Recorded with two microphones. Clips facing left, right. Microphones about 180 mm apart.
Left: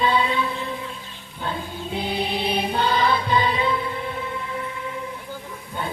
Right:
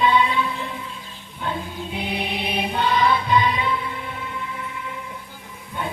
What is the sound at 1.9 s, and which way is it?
Music, 30° left (ahead or behind).